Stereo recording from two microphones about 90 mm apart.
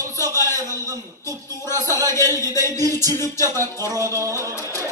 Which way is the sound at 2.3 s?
30° left (ahead or behind).